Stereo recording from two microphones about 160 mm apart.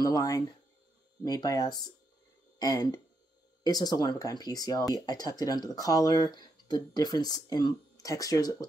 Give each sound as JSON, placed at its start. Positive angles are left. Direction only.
{"t": 0.0, "sound": "speech", "side_deg": 25}